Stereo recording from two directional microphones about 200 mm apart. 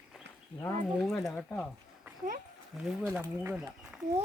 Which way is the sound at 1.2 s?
5° left (ahead or behind).